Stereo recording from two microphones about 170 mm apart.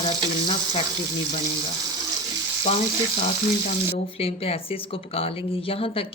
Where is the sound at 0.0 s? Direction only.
30° left (ahead or behind).